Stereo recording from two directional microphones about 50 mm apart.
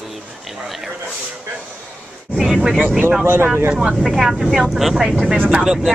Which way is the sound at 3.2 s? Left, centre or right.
Right.